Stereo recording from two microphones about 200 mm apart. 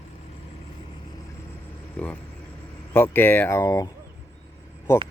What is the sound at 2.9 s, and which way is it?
Speech, 10° left (ahead or behind).